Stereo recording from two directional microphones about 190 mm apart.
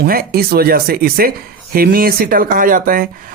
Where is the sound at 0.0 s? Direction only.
50° right (ahead or behind).